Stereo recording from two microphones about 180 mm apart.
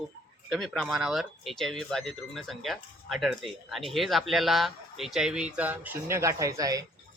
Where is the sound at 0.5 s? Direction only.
Centre (ahead or behind).